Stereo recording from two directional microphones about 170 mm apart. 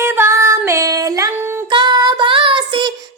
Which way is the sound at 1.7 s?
25° right (ahead or behind).